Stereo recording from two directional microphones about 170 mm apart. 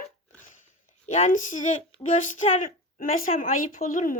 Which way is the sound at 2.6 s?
55° left (ahead or behind).